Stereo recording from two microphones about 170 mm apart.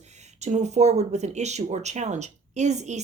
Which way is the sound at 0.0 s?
40° right (ahead or behind).